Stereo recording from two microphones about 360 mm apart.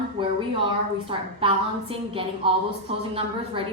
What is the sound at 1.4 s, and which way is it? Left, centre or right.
Speech, centre.